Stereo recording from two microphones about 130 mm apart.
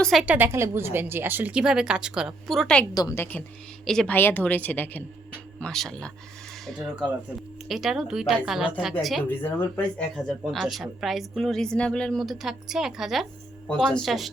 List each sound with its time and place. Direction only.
0.0 s speech: centre (ahead or behind)
0.3 s a woman's voice: 15° right (ahead or behind); by 2.8 s 5° left (ahead or behind)
2.9 s a woman's voice: 30° left (ahead or behind)
3.2 s a woman's voice: 15° left (ahead or behind)
6.7 s speech: 5° right (ahead or behind)
9.2 s a woman's voice: 15° left (ahead or behind)
10.4 s speech: centre (ahead or behind)